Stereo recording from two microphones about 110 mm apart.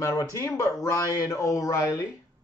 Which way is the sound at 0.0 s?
30° left (ahead or behind).